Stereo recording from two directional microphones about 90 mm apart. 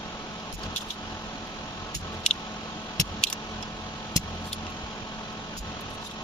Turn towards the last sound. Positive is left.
turn(degrees=40)  # may be behind; listen again after turning